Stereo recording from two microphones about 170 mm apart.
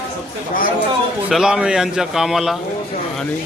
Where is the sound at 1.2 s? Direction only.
5° right (ahead or behind).